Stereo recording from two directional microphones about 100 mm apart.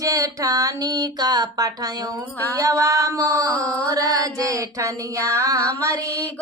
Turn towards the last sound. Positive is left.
turn(degrees=-35)  # may be behind; listen again after turning